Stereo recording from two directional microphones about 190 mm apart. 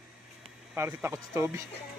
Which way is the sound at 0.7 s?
10° right (ahead or behind).